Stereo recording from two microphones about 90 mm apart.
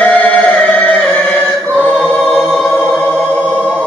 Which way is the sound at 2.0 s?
10° left (ahead or behind).